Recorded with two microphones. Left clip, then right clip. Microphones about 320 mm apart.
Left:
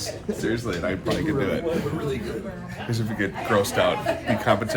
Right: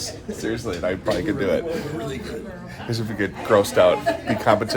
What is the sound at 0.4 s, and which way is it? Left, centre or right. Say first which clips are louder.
Speech: right 2 dB; centre.